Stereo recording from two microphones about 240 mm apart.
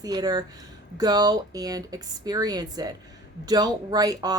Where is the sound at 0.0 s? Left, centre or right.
Centre.